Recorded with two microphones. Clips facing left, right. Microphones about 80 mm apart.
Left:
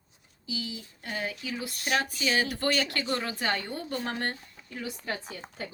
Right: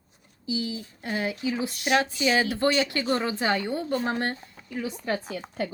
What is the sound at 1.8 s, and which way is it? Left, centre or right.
A woman's voice, right.